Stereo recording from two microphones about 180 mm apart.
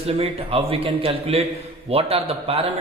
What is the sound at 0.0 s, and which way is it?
Speech, 35° right (ahead or behind).